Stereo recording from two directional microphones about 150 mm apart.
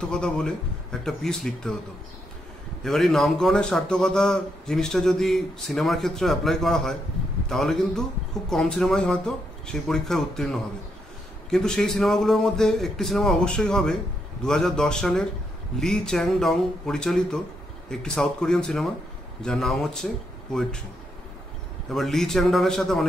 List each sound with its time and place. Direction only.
0.0 s a man's voice: 5° left (ahead or behind)
2.8 s a man's voice: centre (ahead or behind)
21.9 s a man's voice: centre (ahead or behind)